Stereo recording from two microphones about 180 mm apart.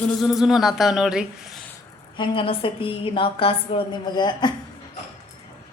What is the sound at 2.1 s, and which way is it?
A woman's voice, 30° left (ahead or behind).